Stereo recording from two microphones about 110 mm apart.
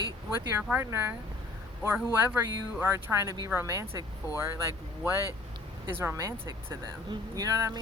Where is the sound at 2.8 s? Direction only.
20° right (ahead or behind).